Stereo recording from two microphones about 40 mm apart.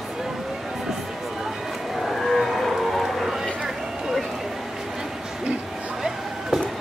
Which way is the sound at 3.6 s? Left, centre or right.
Centre.